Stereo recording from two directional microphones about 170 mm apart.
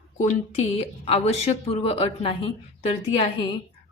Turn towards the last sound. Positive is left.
turn(degrees=30)  # may be behind; listen again after turning